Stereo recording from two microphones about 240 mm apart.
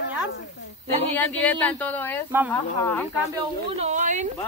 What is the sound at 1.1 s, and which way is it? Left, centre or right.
Speech, centre.